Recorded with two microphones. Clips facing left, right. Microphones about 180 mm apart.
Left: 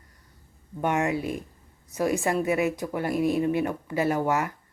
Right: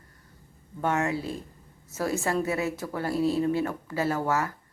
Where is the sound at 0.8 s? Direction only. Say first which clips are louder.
Left 2 dB; 15° left (ahead or behind).